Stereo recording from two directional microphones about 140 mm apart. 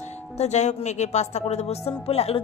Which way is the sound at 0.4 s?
55° left (ahead or behind).